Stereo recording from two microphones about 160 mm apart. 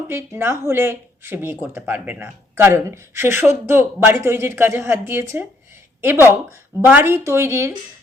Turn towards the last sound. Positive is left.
turn(degrees=-15)  # may be behind; listen again after turning